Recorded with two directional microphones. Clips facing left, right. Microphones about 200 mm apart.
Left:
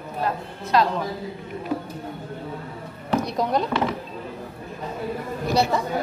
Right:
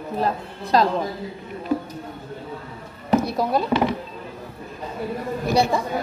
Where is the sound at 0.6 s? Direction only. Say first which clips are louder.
Right 2 dB; 35° right (ahead or behind).